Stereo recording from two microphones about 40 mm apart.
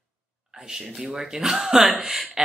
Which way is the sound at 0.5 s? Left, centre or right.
Centre.